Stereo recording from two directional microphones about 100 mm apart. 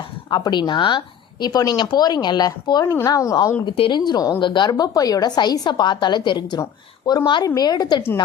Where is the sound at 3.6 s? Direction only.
50° left (ahead or behind).